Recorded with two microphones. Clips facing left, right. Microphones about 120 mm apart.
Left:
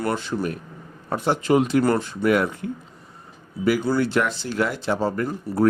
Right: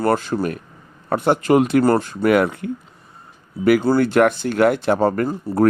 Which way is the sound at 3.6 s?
60° right (ahead or behind).